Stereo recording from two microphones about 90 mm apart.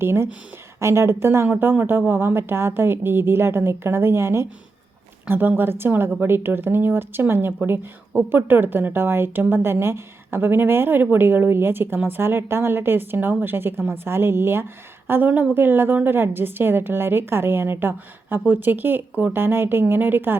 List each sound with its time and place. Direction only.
0.0 s a woman's voice: 30° right (ahead or behind)